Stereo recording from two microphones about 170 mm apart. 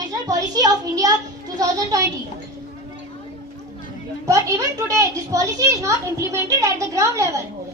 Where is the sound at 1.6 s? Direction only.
20° right (ahead or behind).